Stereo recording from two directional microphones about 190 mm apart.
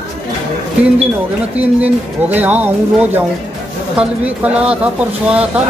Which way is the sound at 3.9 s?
5° right (ahead or behind).